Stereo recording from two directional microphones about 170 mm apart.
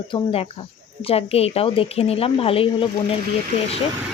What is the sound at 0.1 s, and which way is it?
Speech, 35° left (ahead or behind).